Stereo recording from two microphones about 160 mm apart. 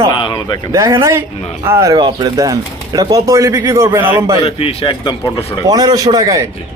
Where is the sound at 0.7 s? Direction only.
20° right (ahead or behind).